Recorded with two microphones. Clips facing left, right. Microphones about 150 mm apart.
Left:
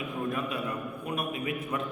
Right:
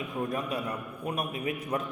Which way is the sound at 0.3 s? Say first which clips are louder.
Even; 35° right (ahead or behind).